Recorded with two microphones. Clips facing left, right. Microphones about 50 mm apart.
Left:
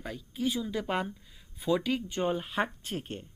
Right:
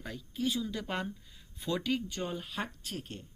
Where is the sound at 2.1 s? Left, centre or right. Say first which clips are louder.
Left 7 dB; left.